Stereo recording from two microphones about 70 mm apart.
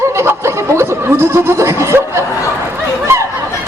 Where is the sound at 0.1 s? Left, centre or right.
Right.